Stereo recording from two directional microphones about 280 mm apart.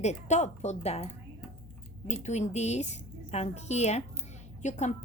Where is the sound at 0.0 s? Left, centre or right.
Left.